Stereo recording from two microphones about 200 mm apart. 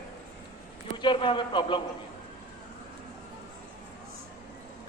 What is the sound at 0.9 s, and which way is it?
Speech, 25° left (ahead or behind).